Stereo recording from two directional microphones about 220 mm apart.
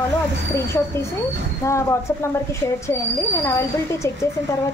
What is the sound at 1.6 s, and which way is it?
A woman's voice, 10° left (ahead or behind).